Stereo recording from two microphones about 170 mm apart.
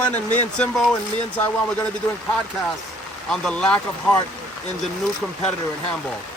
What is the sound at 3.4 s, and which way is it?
Speech, 5° left (ahead or behind).